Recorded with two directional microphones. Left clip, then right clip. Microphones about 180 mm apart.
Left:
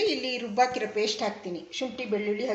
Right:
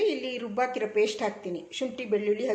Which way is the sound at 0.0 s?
5° right (ahead or behind).